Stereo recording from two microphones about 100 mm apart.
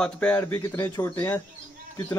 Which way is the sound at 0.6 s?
30° left (ahead or behind).